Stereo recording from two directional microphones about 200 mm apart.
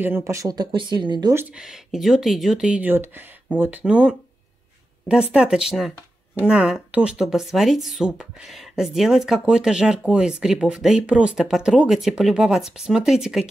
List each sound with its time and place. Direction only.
0.0 s speech: 15° right (ahead or behind)
1.3 s speech: 5° right (ahead or behind)